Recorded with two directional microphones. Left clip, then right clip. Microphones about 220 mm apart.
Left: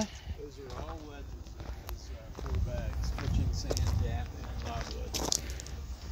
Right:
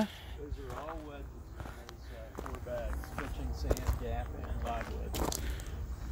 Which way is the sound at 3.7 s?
5° right (ahead or behind).